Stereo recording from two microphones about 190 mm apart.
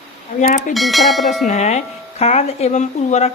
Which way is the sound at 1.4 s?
35° left (ahead or behind).